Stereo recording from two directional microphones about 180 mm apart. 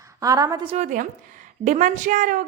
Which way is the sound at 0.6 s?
40° right (ahead or behind).